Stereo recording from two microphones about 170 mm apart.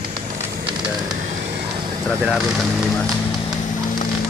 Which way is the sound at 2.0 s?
Centre (ahead or behind).